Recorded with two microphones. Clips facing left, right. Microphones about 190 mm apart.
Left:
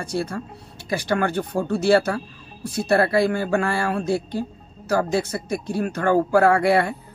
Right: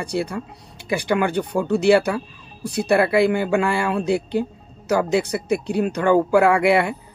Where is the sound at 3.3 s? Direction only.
15° right (ahead or behind).